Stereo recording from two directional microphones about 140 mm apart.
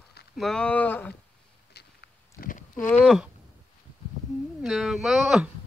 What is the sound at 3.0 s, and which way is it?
Speech, centre (ahead or behind).